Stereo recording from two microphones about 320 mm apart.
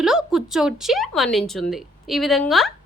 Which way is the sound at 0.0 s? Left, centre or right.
Centre.